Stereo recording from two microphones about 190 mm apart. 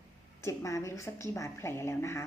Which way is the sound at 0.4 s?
15° left (ahead or behind).